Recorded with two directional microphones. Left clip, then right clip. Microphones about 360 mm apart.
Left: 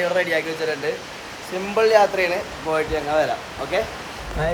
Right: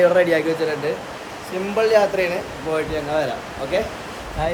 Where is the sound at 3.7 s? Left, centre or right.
Centre.